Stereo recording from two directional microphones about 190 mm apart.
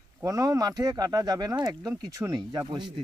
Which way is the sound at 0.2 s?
15° right (ahead or behind).